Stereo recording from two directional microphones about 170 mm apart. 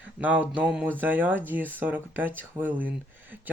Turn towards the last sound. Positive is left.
turn(degrees=-10)  # may be behind; listen again after turning